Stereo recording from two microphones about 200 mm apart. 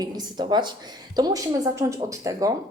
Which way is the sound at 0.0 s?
20° right (ahead or behind).